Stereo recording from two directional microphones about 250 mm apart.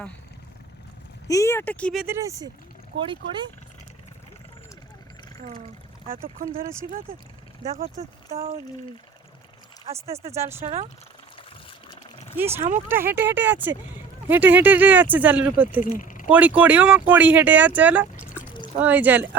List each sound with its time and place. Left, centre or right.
1.3 s speech: centre
6.2 s speech: right
7.7 s speech: right
9.9 s speech: right
10.3 s speech: centre
12.4 s speech: centre
15.8 s speech: left
16.3 s speech: centre